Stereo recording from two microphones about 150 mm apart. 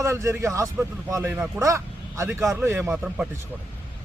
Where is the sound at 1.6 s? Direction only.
20° right (ahead or behind).